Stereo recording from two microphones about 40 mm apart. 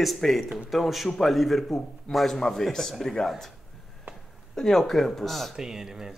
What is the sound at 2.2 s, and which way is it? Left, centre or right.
A man's voice, centre.